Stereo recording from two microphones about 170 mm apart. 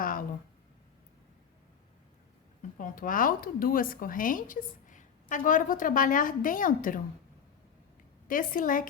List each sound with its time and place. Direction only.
0.0 s a sound: 55° left (ahead or behind)
2.7 s a woman's voice: 55° left (ahead or behind)
8.3 s a woman's voice: 55° left (ahead or behind)